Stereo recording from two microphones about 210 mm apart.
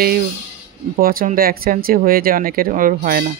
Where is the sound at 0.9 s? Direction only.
45° right (ahead or behind).